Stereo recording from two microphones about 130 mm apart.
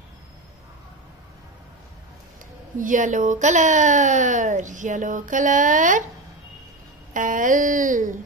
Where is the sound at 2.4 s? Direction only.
85° right.